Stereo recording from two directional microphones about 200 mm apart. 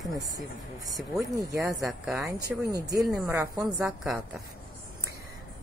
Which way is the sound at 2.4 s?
20° right (ahead or behind).